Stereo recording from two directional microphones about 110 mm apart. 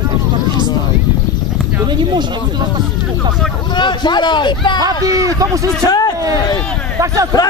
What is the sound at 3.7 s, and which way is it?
Speech, 45° left (ahead or behind).